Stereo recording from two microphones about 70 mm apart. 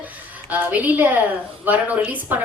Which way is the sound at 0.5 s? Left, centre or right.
Right.